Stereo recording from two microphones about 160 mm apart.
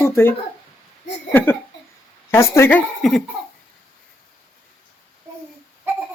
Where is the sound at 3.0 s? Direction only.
Centre (ahead or behind).